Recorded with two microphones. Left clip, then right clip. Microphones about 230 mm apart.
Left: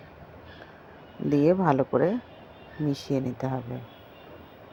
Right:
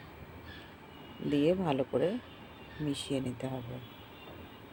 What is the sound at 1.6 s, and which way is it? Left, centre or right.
Speech, left.